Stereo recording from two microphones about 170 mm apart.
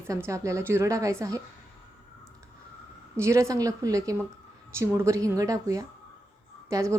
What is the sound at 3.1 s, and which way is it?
A woman's voice, 15° right (ahead or behind).